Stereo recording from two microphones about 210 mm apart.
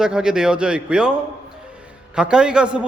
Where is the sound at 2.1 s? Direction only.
5° right (ahead or behind).